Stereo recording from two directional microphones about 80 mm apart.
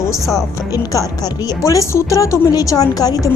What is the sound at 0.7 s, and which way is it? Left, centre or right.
A woman's voice, left.